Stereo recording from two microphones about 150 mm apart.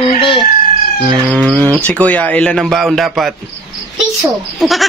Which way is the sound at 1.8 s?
10° left (ahead or behind).